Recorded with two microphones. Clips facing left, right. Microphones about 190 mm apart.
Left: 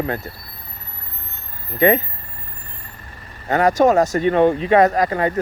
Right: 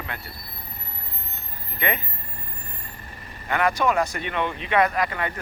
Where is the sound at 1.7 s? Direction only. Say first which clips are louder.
Left 12 dB; 40° left (ahead or behind).